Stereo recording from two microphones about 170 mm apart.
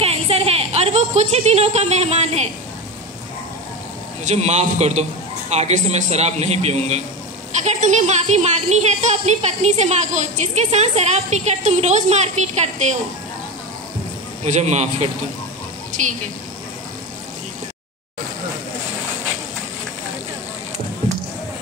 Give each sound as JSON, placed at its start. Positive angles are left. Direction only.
{"t": 0.0, "sound": "a sound", "side_deg": -35}
{"t": 4.2, "sound": "speech", "side_deg": -40}
{"t": 14.4, "sound": "speech", "side_deg": -40}